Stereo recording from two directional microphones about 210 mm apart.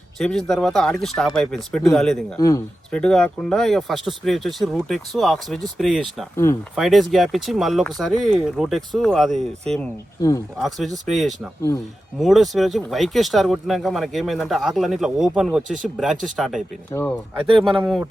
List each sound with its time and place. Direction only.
0.2 s speech: centre (ahead or behind)
6.3 s speech: 10° left (ahead or behind)
6.7 s speech: centre (ahead or behind)
10.2 s speech: 15° left (ahead or behind)
10.6 s speech: centre (ahead or behind)
16.9 s speech: 10° left (ahead or behind)
17.3 s speech: 25° right (ahead or behind)